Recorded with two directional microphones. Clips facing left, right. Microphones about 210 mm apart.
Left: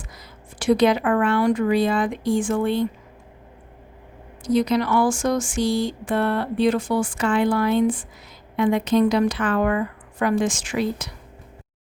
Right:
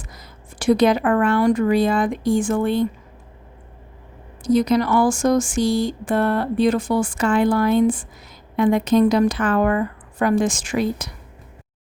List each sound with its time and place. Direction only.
0.1 s a woman's voice: 45° right (ahead or behind)
4.5 s speech: 45° right (ahead or behind)